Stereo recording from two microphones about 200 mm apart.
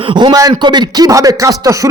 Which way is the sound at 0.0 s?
25° right (ahead or behind).